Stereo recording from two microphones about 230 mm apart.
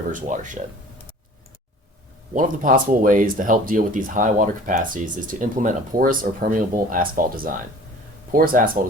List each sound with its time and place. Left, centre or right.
0.1 s speech: right
2.3 s speech: right